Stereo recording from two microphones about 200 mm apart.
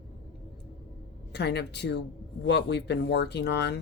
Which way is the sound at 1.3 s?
55° left (ahead or behind).